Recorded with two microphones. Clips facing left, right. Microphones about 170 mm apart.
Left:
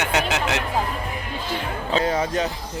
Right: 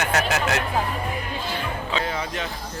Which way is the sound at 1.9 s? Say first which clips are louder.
Left 8 dB; 40° left (ahead or behind).